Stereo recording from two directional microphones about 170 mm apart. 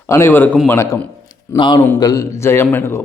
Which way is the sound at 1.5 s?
30° left (ahead or behind).